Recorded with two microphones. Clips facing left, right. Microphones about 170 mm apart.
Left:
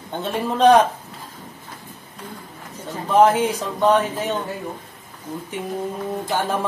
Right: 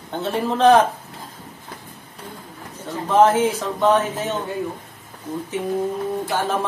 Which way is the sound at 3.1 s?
15° left (ahead or behind).